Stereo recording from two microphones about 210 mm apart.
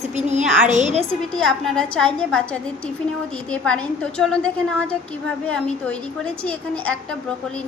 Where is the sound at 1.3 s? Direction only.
Centre (ahead or behind).